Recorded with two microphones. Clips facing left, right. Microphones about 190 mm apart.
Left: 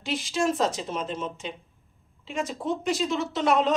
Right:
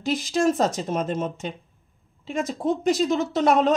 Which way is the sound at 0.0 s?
40° right (ahead or behind).